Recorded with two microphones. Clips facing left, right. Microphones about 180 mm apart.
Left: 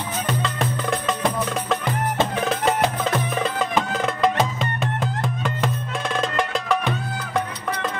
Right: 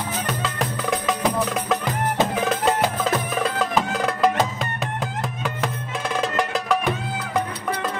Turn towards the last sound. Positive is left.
turn(degrees=-5)  # may be behind; listen again after turning